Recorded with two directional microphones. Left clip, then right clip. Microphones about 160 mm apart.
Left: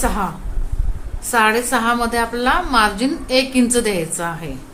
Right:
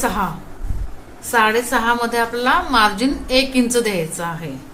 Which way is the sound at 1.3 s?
30° left (ahead or behind).